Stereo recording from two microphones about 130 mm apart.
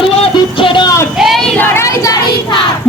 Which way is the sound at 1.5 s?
15° left (ahead or behind).